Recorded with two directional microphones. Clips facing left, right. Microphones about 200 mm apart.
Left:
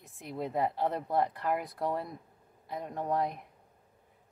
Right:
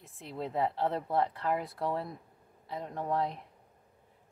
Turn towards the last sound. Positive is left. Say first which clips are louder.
# left 1 dB
turn(degrees=15)  # may be behind; listen again after turning